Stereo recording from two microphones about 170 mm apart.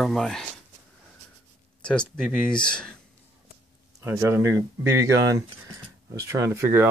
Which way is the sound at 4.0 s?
15° right (ahead or behind).